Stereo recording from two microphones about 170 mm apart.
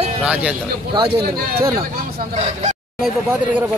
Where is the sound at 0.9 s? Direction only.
30° right (ahead or behind).